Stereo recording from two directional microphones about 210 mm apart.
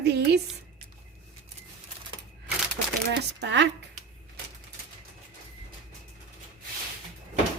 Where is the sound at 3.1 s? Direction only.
55° right (ahead or behind).